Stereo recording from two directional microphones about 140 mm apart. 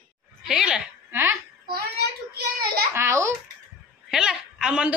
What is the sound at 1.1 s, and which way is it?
Babbling, 15° right (ahead or behind).